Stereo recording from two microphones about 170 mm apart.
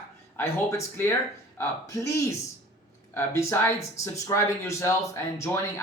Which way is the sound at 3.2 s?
15° left (ahead or behind).